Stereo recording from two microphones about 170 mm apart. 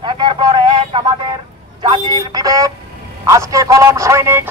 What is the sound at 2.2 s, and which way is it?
Alarm clock, 20° right (ahead or behind).